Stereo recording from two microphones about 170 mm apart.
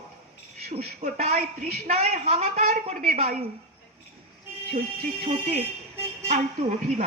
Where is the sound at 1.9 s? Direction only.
40° right (ahead or behind).